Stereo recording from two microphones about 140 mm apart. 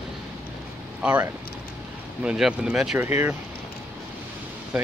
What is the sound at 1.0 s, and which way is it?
Speech, 10° right (ahead or behind).